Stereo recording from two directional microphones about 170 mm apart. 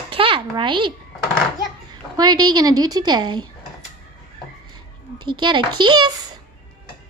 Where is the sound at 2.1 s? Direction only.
25° right (ahead or behind).